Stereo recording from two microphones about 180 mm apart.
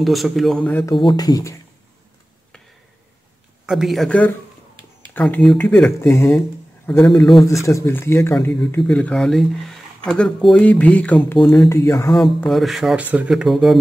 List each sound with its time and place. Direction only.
0.0 s speech: centre (ahead or behind)
0.9 s speech: 25° left (ahead or behind)
3.6 s speech: centre (ahead or behind); by 6.3 s 15° left (ahead or behind)
7.4 s speech: 15° left (ahead or behind); by 11.7 s centre (ahead or behind)
11.7 s speech: 15° left (ahead or behind)
12.1 s speech: centre (ahead or behind)